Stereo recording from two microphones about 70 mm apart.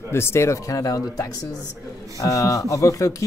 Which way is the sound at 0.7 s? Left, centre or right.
Left.